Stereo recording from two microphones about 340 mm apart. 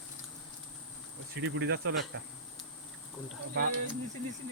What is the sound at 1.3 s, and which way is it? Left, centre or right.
Speech, right.